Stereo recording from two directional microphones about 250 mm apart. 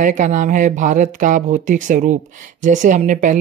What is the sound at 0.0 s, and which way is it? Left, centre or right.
A woman's voice, right.